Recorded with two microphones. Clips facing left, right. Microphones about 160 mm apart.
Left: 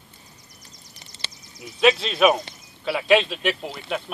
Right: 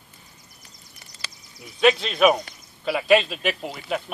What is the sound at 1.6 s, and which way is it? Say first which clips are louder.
Speech: even; centre (ahead or behind).